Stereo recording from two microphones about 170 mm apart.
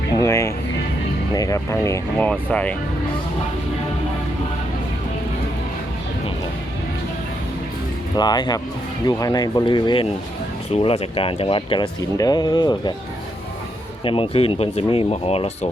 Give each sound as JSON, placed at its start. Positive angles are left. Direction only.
{"t": 0.2, "sound": "music", "side_deg": 20}
{"t": 1.3, "sound": "speech", "side_deg": 20}
{"t": 8.1, "sound": "speech", "side_deg": 25}
{"t": 14.0, "sound": "speech", "side_deg": 30}